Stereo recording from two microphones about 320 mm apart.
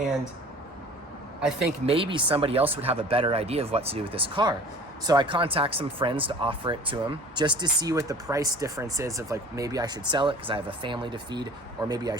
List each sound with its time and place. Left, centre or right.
1.9 s speech: centre